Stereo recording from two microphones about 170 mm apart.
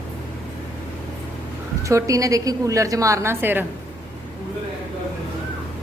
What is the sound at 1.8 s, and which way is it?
A woman's voice, 20° right (ahead or behind).